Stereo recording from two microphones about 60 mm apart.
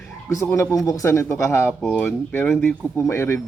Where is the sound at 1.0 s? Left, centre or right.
Left.